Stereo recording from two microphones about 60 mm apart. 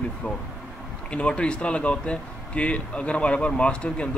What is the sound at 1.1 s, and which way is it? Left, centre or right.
Speech, centre.